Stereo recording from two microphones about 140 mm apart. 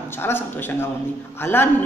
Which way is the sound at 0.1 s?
15° left (ahead or behind).